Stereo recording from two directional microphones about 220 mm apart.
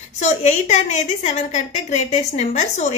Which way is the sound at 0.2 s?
30° left (ahead or behind).